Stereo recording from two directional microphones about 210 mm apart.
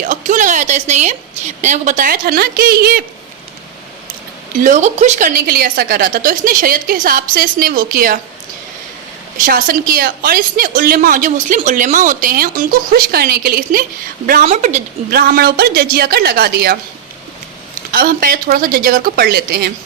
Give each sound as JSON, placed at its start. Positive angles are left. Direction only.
{"t": 0.0, "sound": "a woman's voice", "side_deg": -35}
{"t": 4.6, "sound": "a woman's voice", "side_deg": -35}
{"t": 9.4, "sound": "a woman's voice", "side_deg": -40}
{"t": 14.4, "sound": "a woman's voice", "side_deg": -35}
{"t": 15.1, "sound": "a woman's voice", "side_deg": -45}
{"t": 17.9, "sound": "a woman's voice", "side_deg": -45}